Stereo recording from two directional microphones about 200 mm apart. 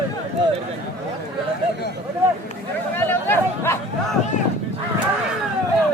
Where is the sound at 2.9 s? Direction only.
10° left (ahead or behind).